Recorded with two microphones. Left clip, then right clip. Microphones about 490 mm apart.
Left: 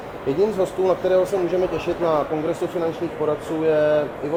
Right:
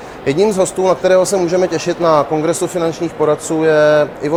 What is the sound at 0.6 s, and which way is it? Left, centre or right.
Speech, right.